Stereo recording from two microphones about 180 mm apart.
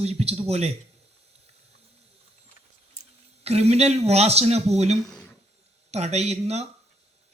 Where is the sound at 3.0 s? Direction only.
35° right (ahead or behind).